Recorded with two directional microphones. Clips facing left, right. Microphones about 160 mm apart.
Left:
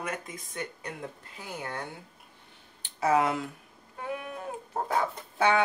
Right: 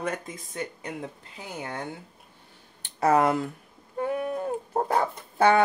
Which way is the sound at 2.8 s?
45° right (ahead or behind).